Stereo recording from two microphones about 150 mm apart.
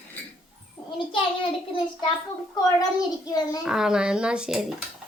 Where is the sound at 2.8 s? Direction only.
25° left (ahead or behind).